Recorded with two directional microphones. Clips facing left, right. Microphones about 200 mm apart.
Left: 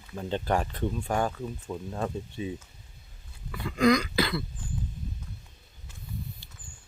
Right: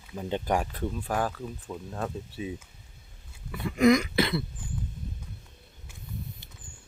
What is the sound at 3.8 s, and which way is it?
Throat clearing, 25° right (ahead or behind).